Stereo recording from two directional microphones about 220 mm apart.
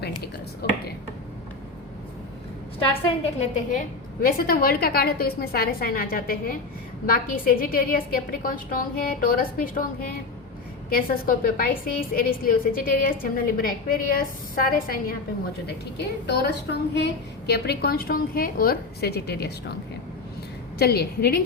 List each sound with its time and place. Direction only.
0.2 s a sound: 45° left (ahead or behind)
3.4 s a woman's voice: 40° left (ahead or behind)
10.8 s a woman's voice: 40° left (ahead or behind)
16.2 s a woman's voice: 50° left (ahead or behind)
20.7 s a woman's voice: 45° left (ahead or behind)